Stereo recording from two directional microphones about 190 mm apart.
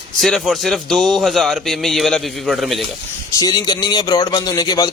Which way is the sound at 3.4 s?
20° left (ahead or behind).